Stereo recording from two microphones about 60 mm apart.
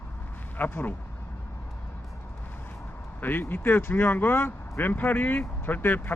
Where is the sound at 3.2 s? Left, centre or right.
Left.